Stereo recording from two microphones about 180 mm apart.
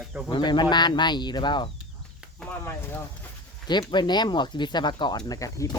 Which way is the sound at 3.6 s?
25° left (ahead or behind).